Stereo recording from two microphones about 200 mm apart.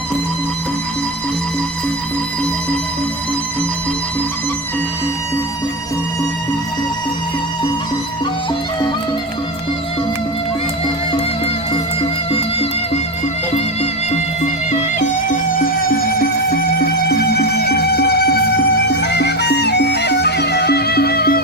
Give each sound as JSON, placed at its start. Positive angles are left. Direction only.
{"t": 12.3, "sound": "music", "side_deg": 30}
{"t": 14.1, "sound": "music", "side_deg": 35}